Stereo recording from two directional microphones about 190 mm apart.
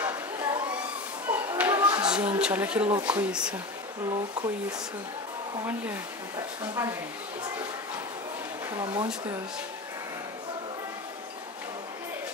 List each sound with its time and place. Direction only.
0.0 s chatter: 10° right (ahead or behind)
1.3 s speech: 10° right (ahead or behind)
6.3 s speech: 20° right (ahead or behind)
8.7 s speech: 25° right (ahead or behind)